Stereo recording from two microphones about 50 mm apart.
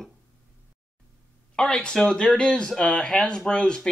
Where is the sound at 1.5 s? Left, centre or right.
Centre.